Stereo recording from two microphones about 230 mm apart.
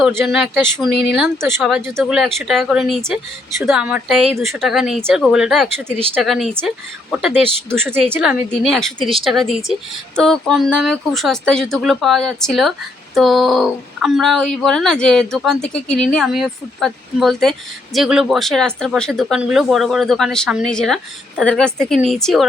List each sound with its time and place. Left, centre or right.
0.2 s a woman's voice: centre
9.0 s speech: right
9.2 s a woman's voice: centre